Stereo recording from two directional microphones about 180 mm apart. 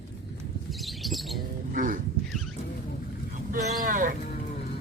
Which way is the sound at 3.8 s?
50° right (ahead or behind).